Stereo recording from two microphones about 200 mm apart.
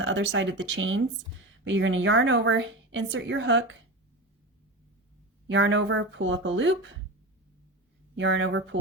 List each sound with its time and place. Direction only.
0.0 s a woman's voice: 70° right (ahead or behind)
5.5 s a woman's voice: 65° right (ahead or behind)
8.1 s a woman's voice: 65° right (ahead or behind)